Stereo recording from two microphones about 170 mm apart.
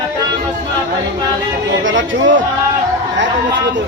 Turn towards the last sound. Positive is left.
turn(degrees=-90)